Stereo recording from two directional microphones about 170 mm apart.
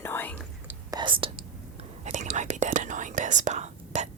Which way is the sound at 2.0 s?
45° right (ahead or behind).